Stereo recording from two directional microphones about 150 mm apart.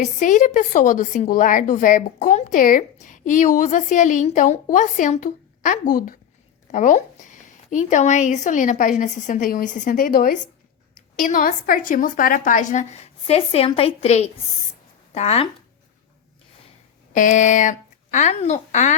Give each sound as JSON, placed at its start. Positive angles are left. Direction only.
{"t": 0.0, "sound": "a woman's voice", "side_deg": 55}
{"t": 6.7, "sound": "a woman's voice", "side_deg": 55}
{"t": 10.9, "sound": "a woman's voice", "side_deg": 60}
{"t": 17.1, "sound": "speech", "side_deg": 60}